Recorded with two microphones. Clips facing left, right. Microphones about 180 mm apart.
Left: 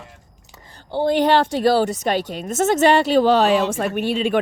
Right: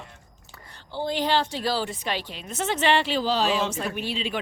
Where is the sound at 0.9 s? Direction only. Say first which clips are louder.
Left 8 dB; 55° left (ahead or behind).